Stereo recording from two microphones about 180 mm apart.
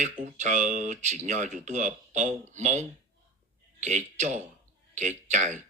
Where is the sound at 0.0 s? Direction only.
40° right (ahead or behind).